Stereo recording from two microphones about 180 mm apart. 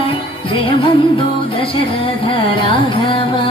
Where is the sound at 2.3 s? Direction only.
30° left (ahead or behind).